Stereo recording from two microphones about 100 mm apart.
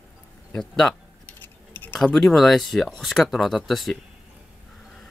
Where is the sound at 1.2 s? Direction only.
20° left (ahead or behind).